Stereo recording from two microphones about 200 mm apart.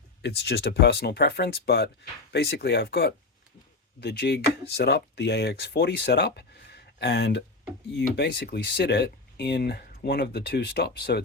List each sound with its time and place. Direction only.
0.2 s speech: 55° left (ahead or behind)